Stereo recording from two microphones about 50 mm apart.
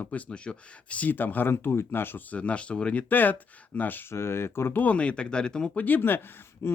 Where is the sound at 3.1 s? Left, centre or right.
Left.